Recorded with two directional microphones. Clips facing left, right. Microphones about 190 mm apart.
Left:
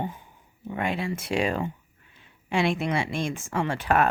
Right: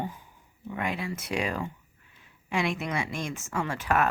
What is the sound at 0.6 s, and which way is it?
Speech, 30° left (ahead or behind).